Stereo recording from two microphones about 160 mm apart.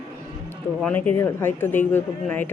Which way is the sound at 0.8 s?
10° left (ahead or behind).